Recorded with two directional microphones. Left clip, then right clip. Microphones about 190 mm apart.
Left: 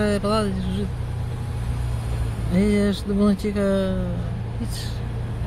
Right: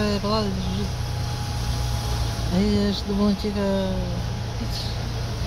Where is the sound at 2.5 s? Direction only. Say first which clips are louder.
Left 3 dB; 40° left (ahead or behind).